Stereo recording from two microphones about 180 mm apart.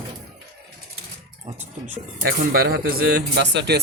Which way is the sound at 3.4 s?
70° right (ahead or behind).